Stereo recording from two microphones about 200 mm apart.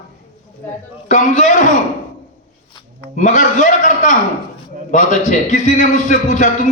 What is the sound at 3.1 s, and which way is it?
A man's voice, 40° left (ahead or behind).